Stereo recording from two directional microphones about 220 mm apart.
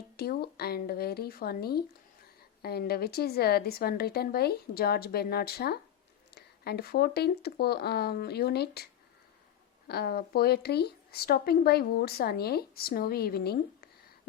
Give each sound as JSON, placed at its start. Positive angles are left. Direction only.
{"t": 0.2, "sound": "speech", "side_deg": 45}